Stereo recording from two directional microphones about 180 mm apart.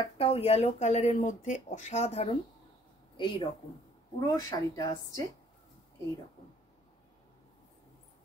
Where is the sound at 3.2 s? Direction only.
25° left (ahead or behind).